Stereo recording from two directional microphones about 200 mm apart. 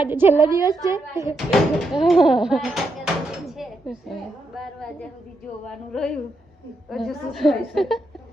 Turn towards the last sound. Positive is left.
turn(degrees=0)  # may be behind; listen again after turning